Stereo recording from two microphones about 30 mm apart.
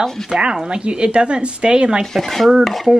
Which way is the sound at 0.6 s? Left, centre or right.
Right.